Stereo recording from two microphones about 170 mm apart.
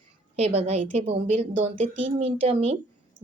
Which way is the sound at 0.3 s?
35° right (ahead or behind).